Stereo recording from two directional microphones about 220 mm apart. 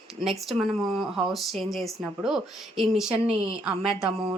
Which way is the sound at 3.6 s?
Centre (ahead or behind).